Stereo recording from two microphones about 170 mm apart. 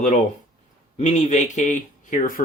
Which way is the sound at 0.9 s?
40° left (ahead or behind).